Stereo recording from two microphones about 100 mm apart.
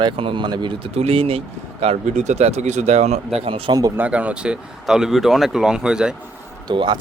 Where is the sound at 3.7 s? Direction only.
35° right (ahead or behind).